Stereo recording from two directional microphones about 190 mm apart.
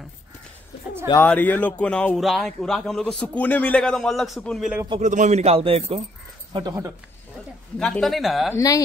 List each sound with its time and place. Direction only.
1.1 s a man's voice: 10° left (ahead or behind)
5.0 s a man's voice: 40° right (ahead or behind)
6.5 s speech: 20° right (ahead or behind)
7.8 s a man's voice: centre (ahead or behind)
8.5 s speech: 15° left (ahead or behind)